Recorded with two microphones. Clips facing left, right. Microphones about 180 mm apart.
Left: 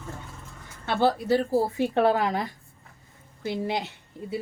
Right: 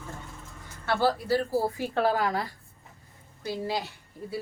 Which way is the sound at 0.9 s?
20° left (ahead or behind).